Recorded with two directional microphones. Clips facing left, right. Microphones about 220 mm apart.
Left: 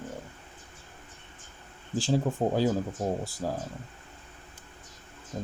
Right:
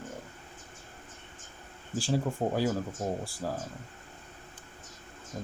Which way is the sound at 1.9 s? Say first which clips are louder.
Left 3 dB; 20° left (ahead or behind).